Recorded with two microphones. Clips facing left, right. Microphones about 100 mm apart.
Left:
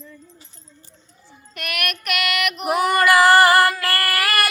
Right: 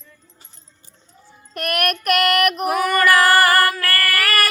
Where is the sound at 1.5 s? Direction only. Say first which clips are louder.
Right 7 dB; 45° right (ahead or behind).